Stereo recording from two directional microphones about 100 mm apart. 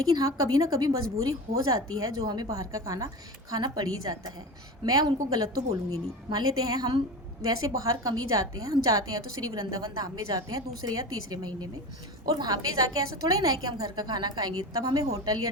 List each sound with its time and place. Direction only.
0.0 s a woman's voice: 40° right (ahead or behind)